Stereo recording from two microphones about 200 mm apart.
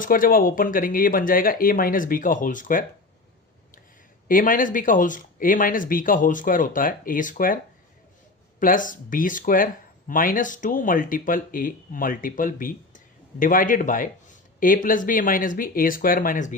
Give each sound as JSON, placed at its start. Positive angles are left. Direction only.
{"t": 0.0, "sound": "speech", "side_deg": 45}
{"t": 4.3, "sound": "speech", "side_deg": 45}